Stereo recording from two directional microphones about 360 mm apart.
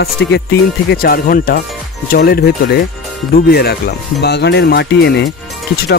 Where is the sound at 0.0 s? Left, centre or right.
Left.